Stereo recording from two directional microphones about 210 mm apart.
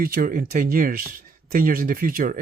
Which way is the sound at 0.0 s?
45° right (ahead or behind).